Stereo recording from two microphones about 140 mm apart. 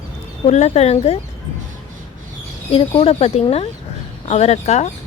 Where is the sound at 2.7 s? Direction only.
40° left (ahead or behind).